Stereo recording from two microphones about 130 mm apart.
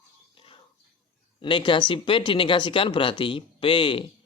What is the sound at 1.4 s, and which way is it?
Speech, 40° left (ahead or behind).